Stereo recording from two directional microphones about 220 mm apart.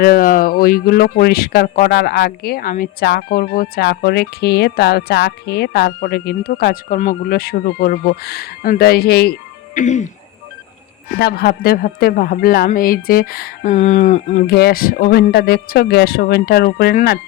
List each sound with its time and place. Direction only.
0.0 s speech: 40° left (ahead or behind)
9.7 s speech: 35° left (ahead or behind)
11.2 s speech: 45° left (ahead or behind)
14.4 s speech: 45° left (ahead or behind)